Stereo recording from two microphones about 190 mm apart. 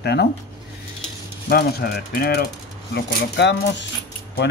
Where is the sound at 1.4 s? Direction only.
55° left (ahead or behind).